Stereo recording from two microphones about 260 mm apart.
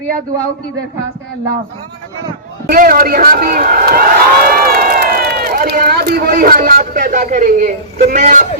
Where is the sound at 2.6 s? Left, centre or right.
Right.